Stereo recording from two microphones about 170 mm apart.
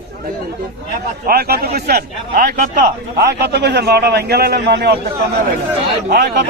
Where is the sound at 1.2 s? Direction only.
65° right (ahead or behind).